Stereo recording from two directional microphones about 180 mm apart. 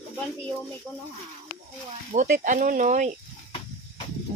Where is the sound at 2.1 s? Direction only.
45° right (ahead or behind).